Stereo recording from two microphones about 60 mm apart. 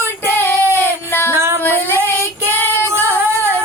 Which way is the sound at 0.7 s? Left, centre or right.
Left.